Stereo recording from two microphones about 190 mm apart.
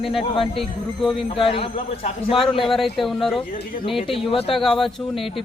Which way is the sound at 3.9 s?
30° left (ahead or behind).